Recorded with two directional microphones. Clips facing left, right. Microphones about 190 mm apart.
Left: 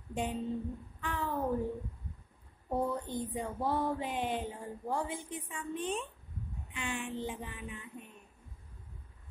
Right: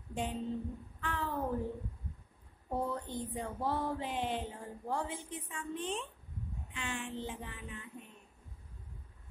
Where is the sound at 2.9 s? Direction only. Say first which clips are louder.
Left 3 dB; 15° left (ahead or behind).